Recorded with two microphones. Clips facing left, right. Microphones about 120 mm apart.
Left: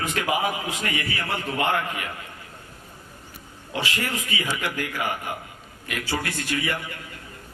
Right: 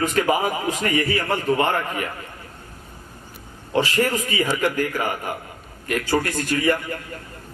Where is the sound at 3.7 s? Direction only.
40° right (ahead or behind).